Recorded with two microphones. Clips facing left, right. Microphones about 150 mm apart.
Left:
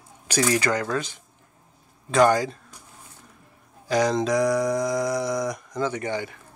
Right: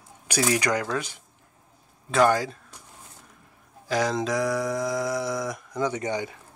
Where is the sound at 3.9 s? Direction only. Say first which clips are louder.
Left 3 dB; centre (ahead or behind).